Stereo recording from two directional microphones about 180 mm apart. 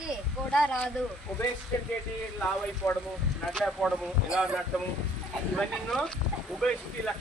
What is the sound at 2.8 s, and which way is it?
Speech, centre (ahead or behind).